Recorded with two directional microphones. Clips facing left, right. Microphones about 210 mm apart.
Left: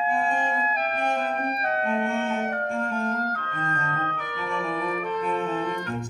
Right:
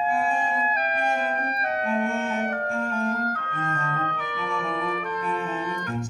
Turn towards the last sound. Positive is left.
turn(degrees=-5)  # may be behind; listen again after turning